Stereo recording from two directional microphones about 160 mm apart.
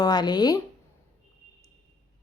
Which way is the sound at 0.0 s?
25° left (ahead or behind).